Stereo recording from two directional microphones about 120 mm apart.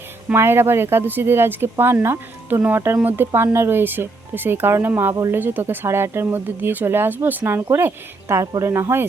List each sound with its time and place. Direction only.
0.3 s speech: 20° right (ahead or behind)